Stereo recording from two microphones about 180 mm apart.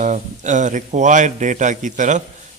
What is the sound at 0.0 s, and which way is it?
A man's voice, 45° right (ahead or behind).